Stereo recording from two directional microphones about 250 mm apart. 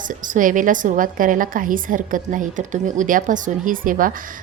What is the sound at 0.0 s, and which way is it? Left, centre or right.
A woman's voice, right.